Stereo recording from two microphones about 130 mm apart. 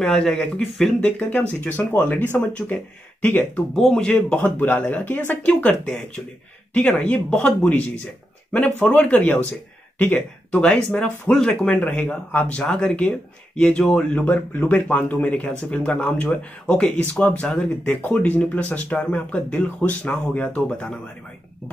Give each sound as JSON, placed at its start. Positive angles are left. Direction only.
{"t": 0.0, "sound": "speech", "side_deg": 5}
{"t": 1.6, "sound": "speech", "side_deg": 15}